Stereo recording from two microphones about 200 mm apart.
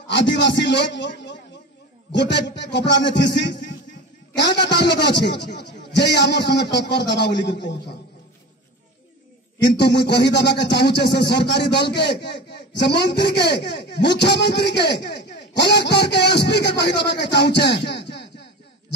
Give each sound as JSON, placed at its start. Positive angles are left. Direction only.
{"t": 0.1, "sound": "music", "side_deg": 60}
{"t": 9.7, "sound": "music", "side_deg": 55}